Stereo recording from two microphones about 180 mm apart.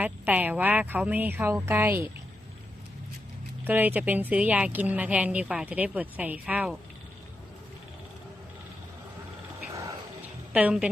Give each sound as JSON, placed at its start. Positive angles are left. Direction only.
{"t": 0.0, "sound": "speech", "side_deg": -10}
{"t": 3.6, "sound": "speech", "side_deg": -10}
{"t": 9.7, "sound": "a sound", "side_deg": -20}
{"t": 10.5, "sound": "speech", "side_deg": -5}